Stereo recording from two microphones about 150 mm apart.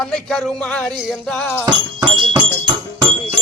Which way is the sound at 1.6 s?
30° right (ahead or behind).